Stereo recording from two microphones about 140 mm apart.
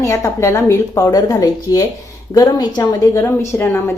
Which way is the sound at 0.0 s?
25° left (ahead or behind).